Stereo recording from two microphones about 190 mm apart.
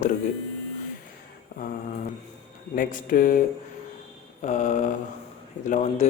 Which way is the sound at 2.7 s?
45° left (ahead or behind).